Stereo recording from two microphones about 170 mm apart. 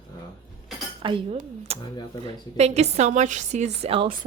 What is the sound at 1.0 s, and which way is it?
A woman's voice, 35° right (ahead or behind).